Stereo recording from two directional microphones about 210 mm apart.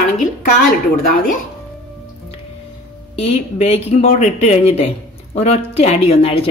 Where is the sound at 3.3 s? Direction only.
30° left (ahead or behind).